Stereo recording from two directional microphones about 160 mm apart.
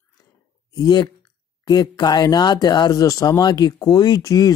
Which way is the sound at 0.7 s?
25° left (ahead or behind).